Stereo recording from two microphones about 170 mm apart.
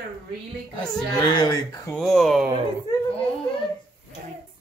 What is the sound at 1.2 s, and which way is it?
Speech, 25° left (ahead or behind).